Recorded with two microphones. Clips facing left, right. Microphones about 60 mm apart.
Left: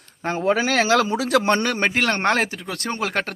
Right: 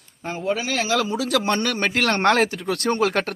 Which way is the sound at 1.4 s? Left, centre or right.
Left.